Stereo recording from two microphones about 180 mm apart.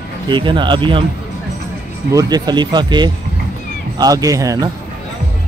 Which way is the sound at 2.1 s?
20° right (ahead or behind).